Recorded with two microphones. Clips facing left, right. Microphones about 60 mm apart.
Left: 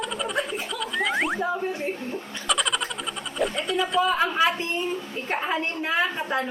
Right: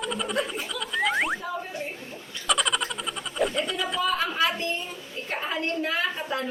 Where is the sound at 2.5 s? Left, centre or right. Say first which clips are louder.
Even; centre.